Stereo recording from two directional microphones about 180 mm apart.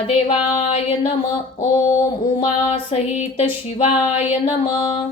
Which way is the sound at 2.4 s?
30° left (ahead or behind).